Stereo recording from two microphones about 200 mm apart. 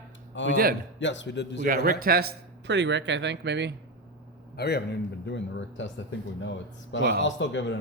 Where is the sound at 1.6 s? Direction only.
45° right (ahead or behind).